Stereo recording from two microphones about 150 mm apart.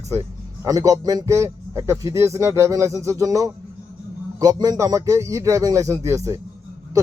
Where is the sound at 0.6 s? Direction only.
20° right (ahead or behind).